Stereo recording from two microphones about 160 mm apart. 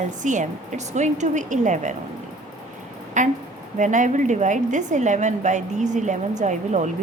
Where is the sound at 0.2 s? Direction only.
50° right (ahead or behind).